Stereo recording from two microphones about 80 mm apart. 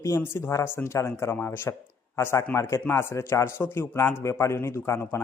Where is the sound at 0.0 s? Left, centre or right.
Left.